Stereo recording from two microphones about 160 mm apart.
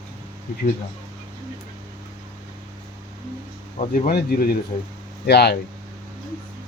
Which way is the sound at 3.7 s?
60° left (ahead or behind).